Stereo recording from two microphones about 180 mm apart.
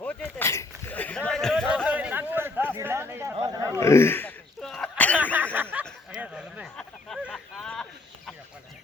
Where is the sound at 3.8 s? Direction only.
15° left (ahead or behind).